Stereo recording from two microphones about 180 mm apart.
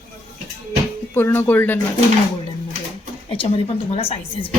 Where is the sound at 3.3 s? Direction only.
30° left (ahead or behind).